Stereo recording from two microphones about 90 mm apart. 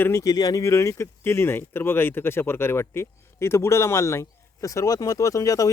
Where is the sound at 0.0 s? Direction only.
30° left (ahead or behind).